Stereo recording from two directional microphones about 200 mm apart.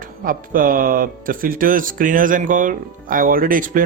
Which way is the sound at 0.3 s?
45° right (ahead or behind).